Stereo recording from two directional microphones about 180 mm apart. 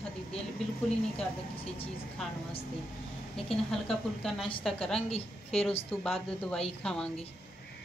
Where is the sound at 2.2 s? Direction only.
Centre (ahead or behind).